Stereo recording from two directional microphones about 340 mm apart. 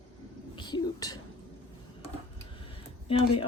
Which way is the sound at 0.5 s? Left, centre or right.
Centre.